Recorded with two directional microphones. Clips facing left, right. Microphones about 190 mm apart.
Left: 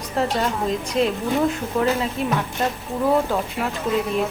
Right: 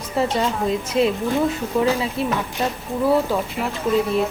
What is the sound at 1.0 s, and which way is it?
Speech, 10° right (ahead or behind).